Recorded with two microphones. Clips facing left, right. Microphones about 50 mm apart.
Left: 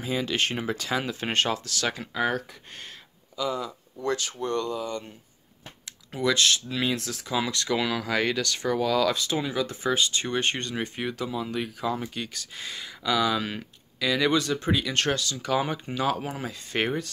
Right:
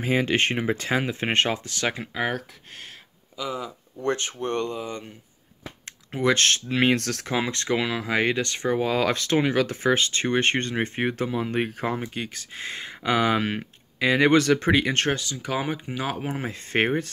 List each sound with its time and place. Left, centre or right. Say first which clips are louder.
0.0 s speech: right 5 dB; right
3.3 s speech: left 2 dB; centre
4.0 s speech: right 2 dB; right
5.9 s speech: right 3 dB; right
7.3 s speech: right 1 dB; right
9.1 s speech: right 6 dB; right
12.0 s speech: right 2 dB; right
14.3 s speech: right 6 dB; right
15.0 s speech: right 1 dB; right